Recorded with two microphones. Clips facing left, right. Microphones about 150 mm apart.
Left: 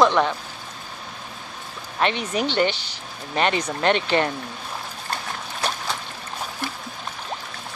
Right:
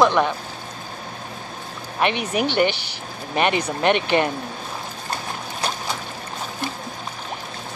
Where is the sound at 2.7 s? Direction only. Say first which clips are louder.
Right 2 dB; 65° right (ahead or behind).